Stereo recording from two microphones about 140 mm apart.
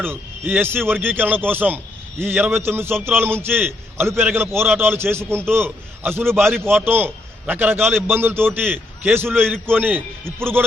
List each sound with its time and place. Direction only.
0.0 s a man's voice: 15° right (ahead or behind)